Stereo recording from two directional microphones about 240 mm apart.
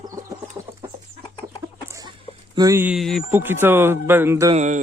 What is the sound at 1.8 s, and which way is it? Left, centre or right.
Chicken, centre.